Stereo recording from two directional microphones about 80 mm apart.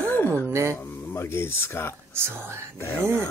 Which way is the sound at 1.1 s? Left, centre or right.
Left.